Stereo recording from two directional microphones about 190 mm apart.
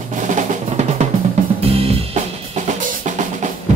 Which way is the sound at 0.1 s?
40° right (ahead or behind).